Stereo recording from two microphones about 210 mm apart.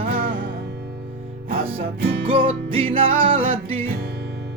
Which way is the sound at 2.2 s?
25° right (ahead or behind).